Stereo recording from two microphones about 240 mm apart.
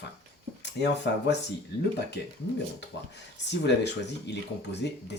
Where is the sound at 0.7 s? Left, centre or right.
Left.